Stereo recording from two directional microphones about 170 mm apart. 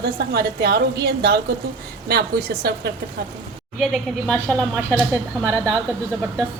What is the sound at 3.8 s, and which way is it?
A woman's voice, centre (ahead or behind).